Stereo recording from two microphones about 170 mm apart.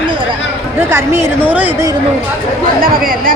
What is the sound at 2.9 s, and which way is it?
Speech, 55° right (ahead or behind).